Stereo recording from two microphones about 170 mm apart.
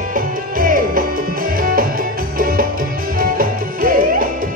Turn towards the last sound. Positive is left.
turn(degrees=-55)  # may be behind; listen again after turning